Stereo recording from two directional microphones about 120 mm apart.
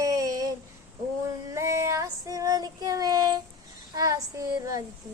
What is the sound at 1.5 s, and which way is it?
Child singing, 25° right (ahead or behind).